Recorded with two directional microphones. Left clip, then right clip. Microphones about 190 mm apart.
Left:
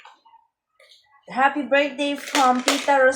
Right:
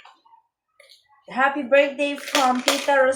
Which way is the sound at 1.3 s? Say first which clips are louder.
Even; 20° left (ahead or behind).